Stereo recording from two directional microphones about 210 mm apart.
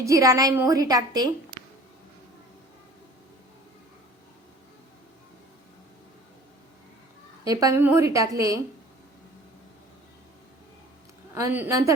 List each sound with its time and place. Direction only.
0.0 s a woman's voice: 15° right (ahead or behind)
7.4 s a woman's voice: 15° right (ahead or behind)
11.3 s a woman's voice: 10° right (ahead or behind)